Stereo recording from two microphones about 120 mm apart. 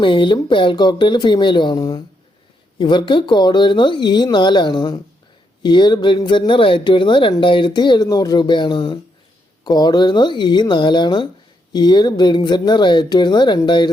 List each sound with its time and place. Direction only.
0.0 s speech: 45° left (ahead or behind)